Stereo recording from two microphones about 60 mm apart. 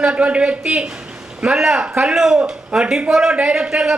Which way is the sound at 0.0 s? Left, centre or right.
Centre.